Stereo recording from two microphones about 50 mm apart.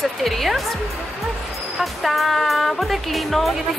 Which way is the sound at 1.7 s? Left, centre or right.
Centre.